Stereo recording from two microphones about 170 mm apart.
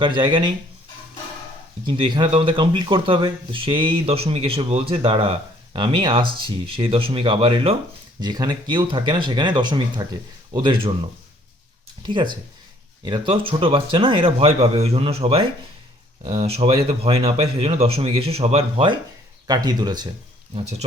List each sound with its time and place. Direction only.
0.0 s speech: 30° right (ahead or behind)
1.9 s speech: 25° right (ahead or behind)
12.0 s a man's voice: 25° right (ahead or behind)